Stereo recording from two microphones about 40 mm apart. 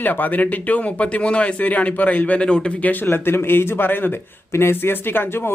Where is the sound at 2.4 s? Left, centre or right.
Left.